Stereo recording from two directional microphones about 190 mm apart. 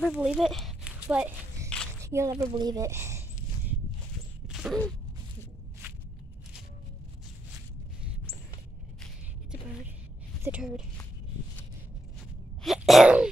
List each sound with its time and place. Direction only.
0.0 s a child's voice: centre (ahead or behind)
4.5 s a sound: centre (ahead or behind)
10.4 s a child's voice: 5° right (ahead or behind)
12.6 s sneeze: centre (ahead or behind)